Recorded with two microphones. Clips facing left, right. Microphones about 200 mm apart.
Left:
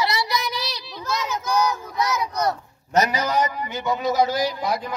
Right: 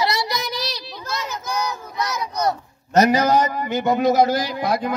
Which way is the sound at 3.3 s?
45° right (ahead or behind).